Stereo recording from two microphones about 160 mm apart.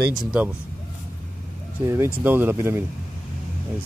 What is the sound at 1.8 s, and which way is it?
Speech, 15° right (ahead or behind).